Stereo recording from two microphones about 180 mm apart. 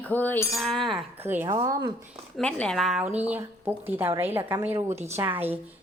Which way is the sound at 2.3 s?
5° left (ahead or behind).